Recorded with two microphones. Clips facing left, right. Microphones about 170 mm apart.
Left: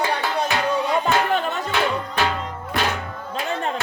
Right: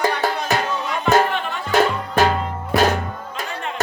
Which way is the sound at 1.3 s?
40° left (ahead or behind).